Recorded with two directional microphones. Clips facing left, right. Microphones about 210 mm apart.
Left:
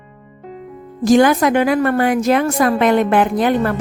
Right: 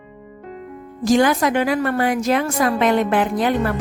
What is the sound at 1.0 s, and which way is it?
A woman's voice, 50° left (ahead or behind).